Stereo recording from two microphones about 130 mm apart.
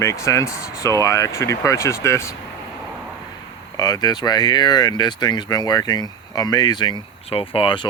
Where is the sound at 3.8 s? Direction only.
30° left (ahead or behind).